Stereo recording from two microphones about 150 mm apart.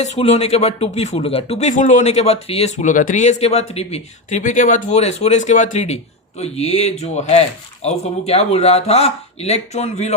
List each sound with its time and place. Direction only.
0.0 s speech: 45° left (ahead or behind)